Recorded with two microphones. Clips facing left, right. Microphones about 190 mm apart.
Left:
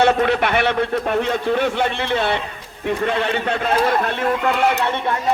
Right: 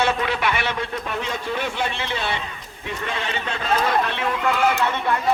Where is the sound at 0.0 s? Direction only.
55° left (ahead or behind).